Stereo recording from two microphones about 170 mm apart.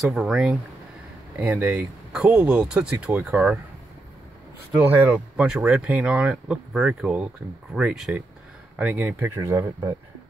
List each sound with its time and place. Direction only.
0.0 s speech: centre (ahead or behind)
4.7 s speech: 15° right (ahead or behind)